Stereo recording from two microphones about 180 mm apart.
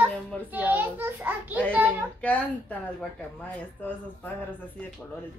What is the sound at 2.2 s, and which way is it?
Speech, 5° left (ahead or behind).